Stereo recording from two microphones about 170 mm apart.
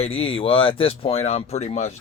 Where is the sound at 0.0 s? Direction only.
35° left (ahead or behind).